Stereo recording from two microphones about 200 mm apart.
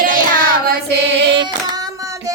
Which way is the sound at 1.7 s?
15° right (ahead or behind).